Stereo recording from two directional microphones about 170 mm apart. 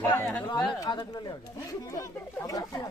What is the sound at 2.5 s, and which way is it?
Speech, 20° left (ahead or behind).